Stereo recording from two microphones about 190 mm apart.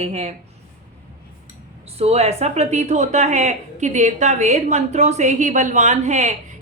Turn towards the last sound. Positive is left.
turn(degrees=-35)  # may be behind; listen again after turning